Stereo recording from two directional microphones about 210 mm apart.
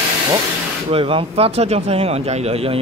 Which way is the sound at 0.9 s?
25° right (ahead or behind).